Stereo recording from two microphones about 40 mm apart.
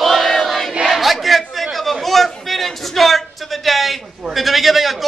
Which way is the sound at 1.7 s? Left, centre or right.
Centre.